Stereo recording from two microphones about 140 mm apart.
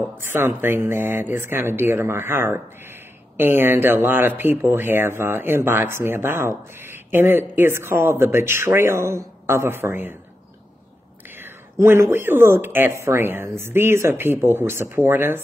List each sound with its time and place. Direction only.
0.2 s speech: 15° right (ahead or behind)
11.8 s speech: 15° right (ahead or behind)